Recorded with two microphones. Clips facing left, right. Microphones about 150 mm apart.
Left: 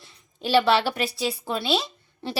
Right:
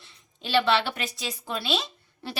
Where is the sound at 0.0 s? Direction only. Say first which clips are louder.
Left 8 dB; 40° left (ahead or behind).